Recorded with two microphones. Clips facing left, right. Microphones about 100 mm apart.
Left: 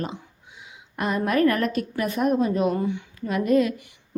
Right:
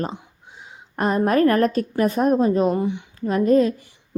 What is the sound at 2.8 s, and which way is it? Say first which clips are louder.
Speech: right 2 dB; 20° right (ahead or behind).